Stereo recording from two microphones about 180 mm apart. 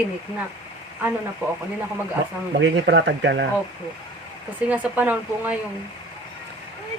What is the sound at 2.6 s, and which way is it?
Speech, 75° right (ahead or behind).